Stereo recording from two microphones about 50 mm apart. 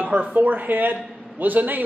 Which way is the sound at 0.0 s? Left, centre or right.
Right.